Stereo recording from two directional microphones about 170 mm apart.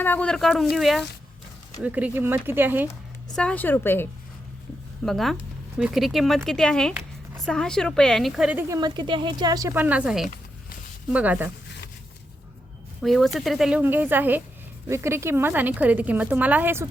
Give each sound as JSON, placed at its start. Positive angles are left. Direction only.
{"t": 0.0, "sound": "a woman's voice", "side_deg": 10}
{"t": 3.3, "sound": "a woman's voice", "side_deg": 5}
{"t": 5.0, "sound": "speech", "side_deg": 0}
{"t": 8.8, "sound": "a woman's voice", "side_deg": -25}
{"t": 13.0, "sound": "a woman's voice", "side_deg": 0}